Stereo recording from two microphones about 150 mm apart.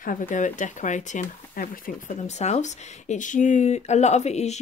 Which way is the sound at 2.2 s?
50° left (ahead or behind).